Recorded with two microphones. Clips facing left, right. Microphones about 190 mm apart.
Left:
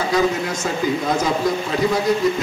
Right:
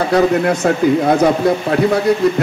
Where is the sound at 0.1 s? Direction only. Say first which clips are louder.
Right 7 dB; 60° right (ahead or behind).